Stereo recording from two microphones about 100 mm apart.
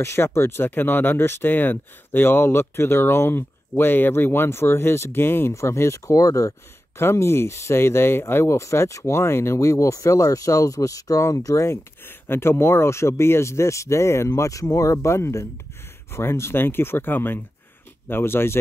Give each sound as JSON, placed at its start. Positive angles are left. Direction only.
{"t": 0.0, "sound": "speech", "side_deg": 25}